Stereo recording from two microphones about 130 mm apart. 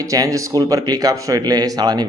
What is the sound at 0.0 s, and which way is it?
A man's voice, 25° right (ahead or behind).